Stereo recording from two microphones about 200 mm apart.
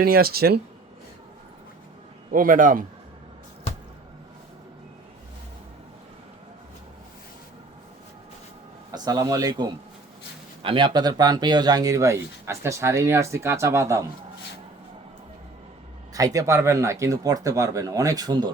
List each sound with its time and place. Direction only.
0.0 s speech: 50° right (ahead or behind)
2.3 s speech: 45° right (ahead or behind)
8.9 s a man's voice: 20° right (ahead or behind)
16.1 s speech: 15° right (ahead or behind)